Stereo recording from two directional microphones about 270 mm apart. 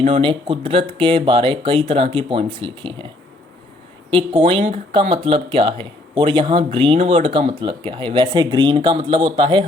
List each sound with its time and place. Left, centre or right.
0.0 s speech: centre
4.1 s speech: centre